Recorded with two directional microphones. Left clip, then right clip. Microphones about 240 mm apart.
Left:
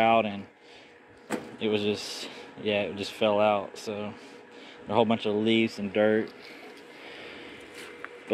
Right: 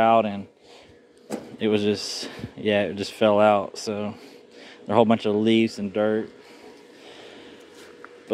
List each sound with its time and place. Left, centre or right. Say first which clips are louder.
0.0 s speech: right 4 dB; centre
1.6 s speech: right 6 dB; right
5.9 s speech: right 1 dB; centre